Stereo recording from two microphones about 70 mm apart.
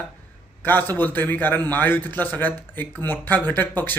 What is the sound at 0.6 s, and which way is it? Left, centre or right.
Speech, left.